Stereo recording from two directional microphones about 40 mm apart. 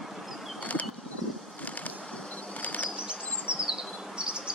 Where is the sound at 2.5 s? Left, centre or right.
Left.